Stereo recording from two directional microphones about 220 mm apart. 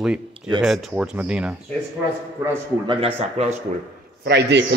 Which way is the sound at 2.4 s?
20° right (ahead or behind).